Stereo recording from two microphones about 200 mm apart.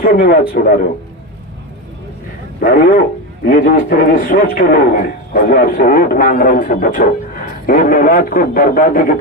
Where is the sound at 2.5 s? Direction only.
50° left (ahead or behind).